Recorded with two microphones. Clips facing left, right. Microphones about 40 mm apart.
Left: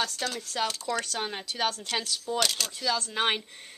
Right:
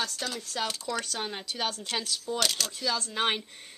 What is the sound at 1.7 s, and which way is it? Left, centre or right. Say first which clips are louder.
Speech: left 1 dB; centre.